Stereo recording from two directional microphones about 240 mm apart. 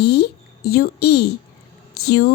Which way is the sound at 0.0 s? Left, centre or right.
Left.